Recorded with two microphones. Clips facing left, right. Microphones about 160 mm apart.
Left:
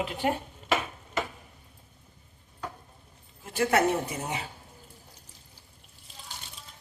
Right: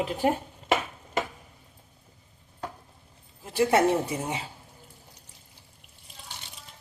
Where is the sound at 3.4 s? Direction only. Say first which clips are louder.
Right 3 dB; 30° right (ahead or behind).